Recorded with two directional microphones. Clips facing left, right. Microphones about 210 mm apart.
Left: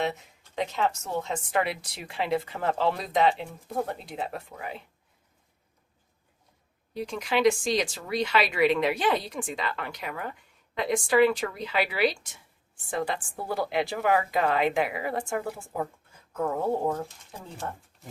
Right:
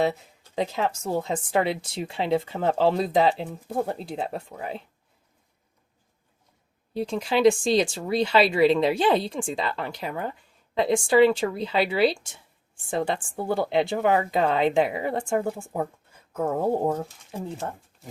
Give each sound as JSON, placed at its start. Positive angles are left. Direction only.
{"t": 0.5, "sound": "speech", "side_deg": -35}
{"t": 4.2, "sound": "speech", "side_deg": 0}
{"t": 6.9, "sound": "speech", "side_deg": -30}